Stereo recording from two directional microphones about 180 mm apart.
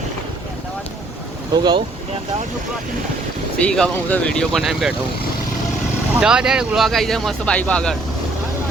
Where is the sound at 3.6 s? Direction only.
5° left (ahead or behind).